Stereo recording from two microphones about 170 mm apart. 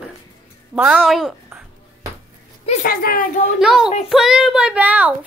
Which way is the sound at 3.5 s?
5° right (ahead or behind).